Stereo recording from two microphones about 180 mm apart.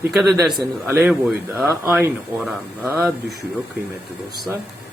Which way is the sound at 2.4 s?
Centre (ahead or behind).